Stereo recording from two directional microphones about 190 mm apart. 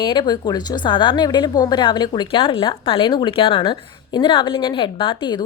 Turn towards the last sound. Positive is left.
turn(degrees=25)  # may be behind; listen again after turning